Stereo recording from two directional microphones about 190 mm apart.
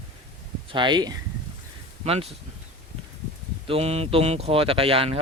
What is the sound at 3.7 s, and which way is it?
Speech, 35° right (ahead or behind).